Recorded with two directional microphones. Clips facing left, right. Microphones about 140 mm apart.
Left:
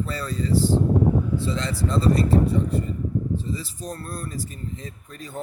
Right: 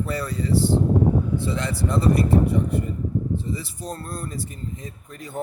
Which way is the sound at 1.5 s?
20° right (ahead or behind).